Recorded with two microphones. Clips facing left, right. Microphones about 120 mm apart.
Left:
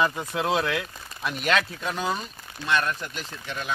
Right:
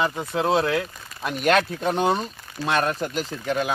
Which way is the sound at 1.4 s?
50° right (ahead or behind).